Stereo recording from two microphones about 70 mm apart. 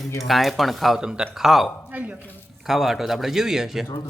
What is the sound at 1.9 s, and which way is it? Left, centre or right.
Speech, right.